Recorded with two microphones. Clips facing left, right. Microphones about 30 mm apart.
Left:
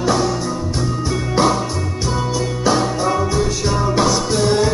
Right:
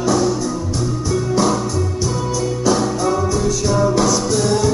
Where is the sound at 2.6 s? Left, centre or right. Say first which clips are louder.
Left 1 dB; left.